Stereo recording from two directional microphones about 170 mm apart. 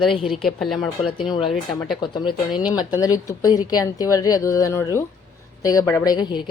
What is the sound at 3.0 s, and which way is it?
A woman's voice, 20° left (ahead or behind).